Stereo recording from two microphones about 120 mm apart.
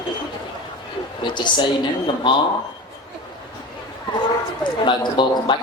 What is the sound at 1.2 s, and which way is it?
A man's voice, 40° left (ahead or behind).